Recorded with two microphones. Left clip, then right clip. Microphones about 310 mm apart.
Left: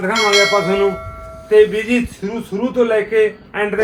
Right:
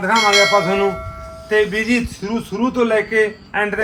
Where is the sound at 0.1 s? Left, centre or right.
Centre.